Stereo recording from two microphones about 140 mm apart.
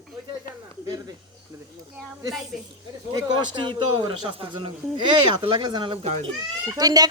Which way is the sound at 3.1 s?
35° right (ahead or behind).